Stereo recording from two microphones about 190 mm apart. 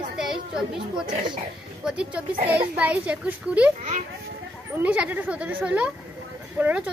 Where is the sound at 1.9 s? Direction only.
5° right (ahead or behind).